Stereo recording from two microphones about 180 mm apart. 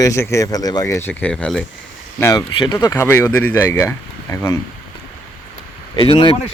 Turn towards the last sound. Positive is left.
turn(degrees=25)  # may be behind; listen again after turning